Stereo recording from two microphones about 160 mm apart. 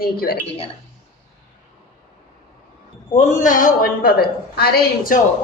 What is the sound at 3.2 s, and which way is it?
A woman's voice, 55° left (ahead or behind).